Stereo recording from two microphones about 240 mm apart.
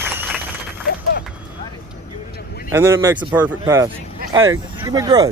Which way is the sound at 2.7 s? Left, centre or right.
Centre.